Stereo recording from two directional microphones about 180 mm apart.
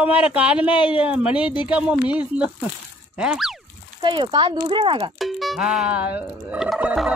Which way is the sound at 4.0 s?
25° right (ahead or behind).